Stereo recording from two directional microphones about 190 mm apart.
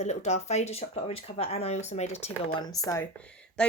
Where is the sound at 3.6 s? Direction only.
5° left (ahead or behind).